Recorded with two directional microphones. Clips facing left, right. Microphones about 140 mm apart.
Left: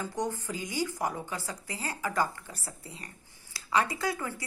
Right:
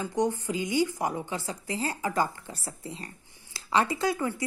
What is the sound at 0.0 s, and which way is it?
A woman's voice, 20° right (ahead or behind).